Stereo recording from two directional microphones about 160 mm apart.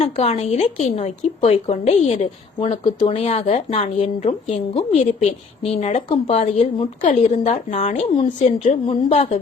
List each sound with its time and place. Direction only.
0.0 s speech: 40° left (ahead or behind)
2.6 s speech: 35° left (ahead or behind)